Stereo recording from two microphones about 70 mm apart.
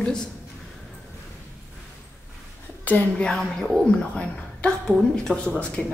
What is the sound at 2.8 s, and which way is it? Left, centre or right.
Speech, left.